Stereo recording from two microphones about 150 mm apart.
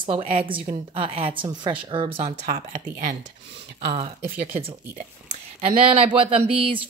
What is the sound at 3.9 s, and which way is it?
Speech, 40° right (ahead or behind).